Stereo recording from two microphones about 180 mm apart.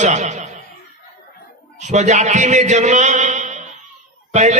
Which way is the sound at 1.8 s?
40° right (ahead or behind).